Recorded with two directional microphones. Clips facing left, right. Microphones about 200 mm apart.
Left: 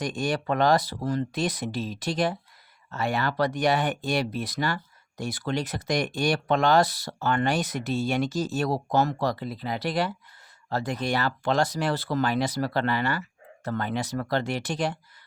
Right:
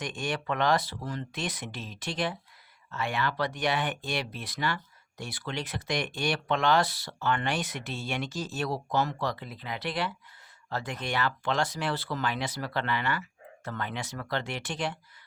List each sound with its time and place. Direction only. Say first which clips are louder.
0.0 s speech: left 6 dB; 40° left (ahead or behind)